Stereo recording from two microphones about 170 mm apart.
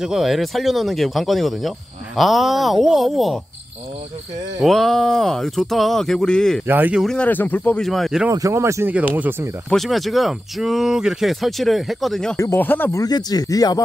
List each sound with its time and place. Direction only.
0.0 s speech: centre (ahead or behind)
4.6 s speech: centre (ahead or behind)
6.7 s speech: 10° right (ahead or behind)
7.1 s speech: 10° left (ahead or behind)
8.3 s speech: 20° right (ahead or behind)
9.7 s speech: centre (ahead or behind)
12.4 s speech: 15° left (ahead or behind)